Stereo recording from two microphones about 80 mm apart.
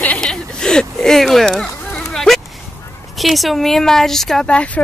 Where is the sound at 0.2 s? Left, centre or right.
Centre.